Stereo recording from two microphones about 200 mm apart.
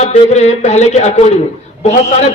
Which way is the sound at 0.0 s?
35° left (ahead or behind).